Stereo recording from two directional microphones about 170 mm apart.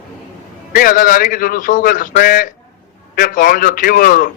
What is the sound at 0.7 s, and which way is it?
A man's voice, 55° left (ahead or behind).